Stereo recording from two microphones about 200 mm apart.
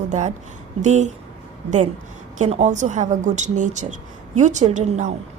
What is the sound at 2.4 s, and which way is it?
Speech, 35° right (ahead or behind).